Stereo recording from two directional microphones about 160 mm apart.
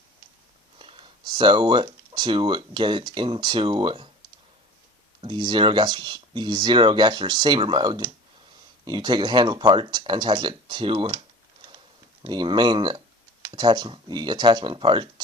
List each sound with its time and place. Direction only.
0.8 s speech: 35° right (ahead or behind)
5.2 s speech: 30° right (ahead or behind)
12.2 s speech: 30° right (ahead or behind)